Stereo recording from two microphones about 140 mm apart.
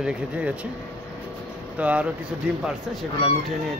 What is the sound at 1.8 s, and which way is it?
Speech, 10° right (ahead or behind).